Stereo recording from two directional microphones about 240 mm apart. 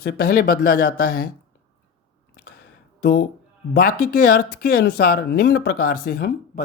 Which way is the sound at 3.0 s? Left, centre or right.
Left.